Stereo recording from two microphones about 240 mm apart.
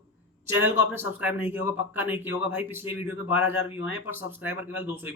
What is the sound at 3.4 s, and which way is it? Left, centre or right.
Speech, left.